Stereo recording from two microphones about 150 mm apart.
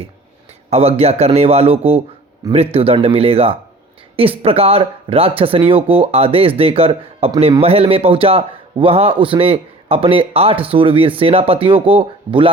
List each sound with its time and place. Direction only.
0.7 s a man's voice: 40° right (ahead or behind)